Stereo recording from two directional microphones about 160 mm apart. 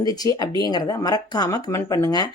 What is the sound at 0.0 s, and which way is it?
Speech, 25° left (ahead or behind).